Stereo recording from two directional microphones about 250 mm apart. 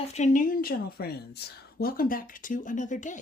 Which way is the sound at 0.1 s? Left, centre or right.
Left.